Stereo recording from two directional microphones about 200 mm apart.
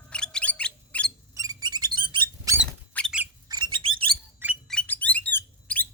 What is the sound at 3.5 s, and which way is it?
Bird, 20° right (ahead or behind).